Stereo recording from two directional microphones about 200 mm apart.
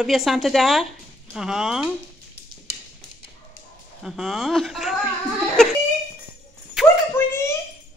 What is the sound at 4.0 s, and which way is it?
Speech, centre (ahead or behind).